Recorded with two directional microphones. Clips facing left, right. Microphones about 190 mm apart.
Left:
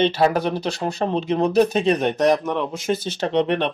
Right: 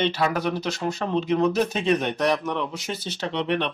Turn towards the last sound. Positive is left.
turn(degrees=45)  # may be behind; listen again after turning